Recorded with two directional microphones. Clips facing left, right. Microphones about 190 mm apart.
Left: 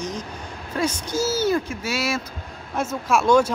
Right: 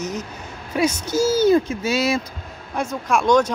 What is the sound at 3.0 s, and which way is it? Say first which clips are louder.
Speech: even; 5° left (ahead or behind).